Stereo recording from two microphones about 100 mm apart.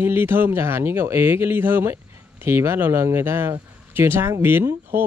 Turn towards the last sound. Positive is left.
turn(degrees=-20)  # may be behind; listen again after turning